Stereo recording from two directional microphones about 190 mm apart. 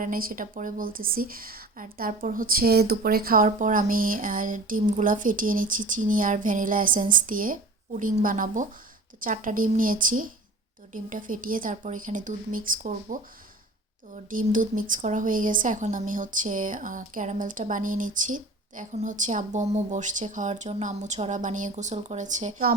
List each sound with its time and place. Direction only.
0.0 s speech: 50° right (ahead or behind)
14.3 s a woman's voice: 45° right (ahead or behind)